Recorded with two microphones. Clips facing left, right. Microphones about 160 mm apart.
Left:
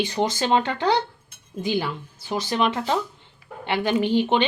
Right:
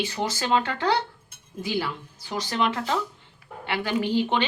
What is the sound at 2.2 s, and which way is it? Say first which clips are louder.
Cutlery: left 3 dB; 20° left (ahead or behind).